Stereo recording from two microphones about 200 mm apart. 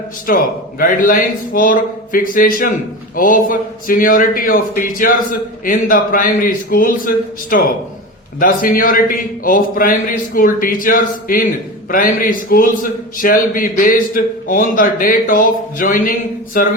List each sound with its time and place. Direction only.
0.3 s a man's voice: 45° left (ahead or behind)